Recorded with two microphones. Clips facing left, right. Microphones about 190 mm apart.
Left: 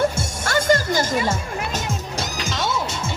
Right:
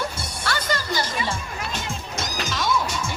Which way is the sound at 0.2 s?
45° left (ahead or behind).